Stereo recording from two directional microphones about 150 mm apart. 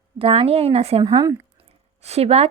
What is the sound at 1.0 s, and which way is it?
Speech, 25° right (ahead or behind).